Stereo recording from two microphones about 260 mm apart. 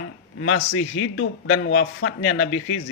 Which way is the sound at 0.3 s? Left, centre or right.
Left.